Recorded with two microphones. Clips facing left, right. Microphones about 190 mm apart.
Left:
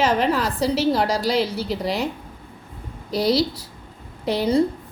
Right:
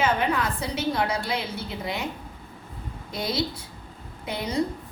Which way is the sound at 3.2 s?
35° left (ahead or behind).